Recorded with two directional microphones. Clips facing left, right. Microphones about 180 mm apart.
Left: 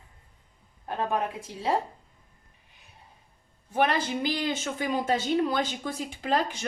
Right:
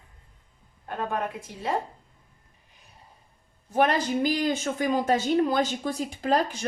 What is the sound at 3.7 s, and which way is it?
A woman's voice, 40° right (ahead or behind).